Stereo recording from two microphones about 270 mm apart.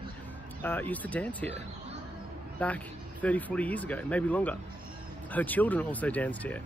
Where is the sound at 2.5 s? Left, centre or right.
Centre.